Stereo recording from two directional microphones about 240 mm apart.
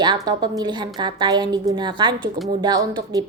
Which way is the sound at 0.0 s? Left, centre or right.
Centre.